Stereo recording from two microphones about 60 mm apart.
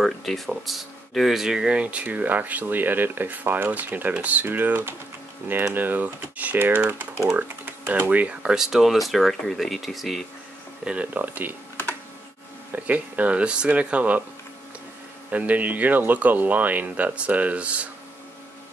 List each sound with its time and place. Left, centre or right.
0.0 s speech: centre; by 6.6 s right
7.3 s typing: right
8.1 s speech: right; by 10.2 s centre
10.9 s speech: right
12.7 s speech: right
15.3 s speech: right